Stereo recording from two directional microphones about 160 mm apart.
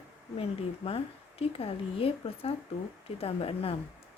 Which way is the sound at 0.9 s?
35° left (ahead or behind).